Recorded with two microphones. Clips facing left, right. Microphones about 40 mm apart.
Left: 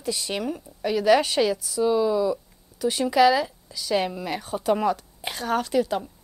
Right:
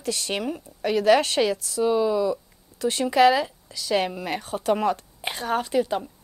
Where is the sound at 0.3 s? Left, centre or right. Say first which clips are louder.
Right 1 dB; right.